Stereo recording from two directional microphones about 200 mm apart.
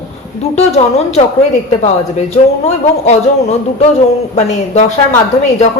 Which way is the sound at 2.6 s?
35° left (ahead or behind).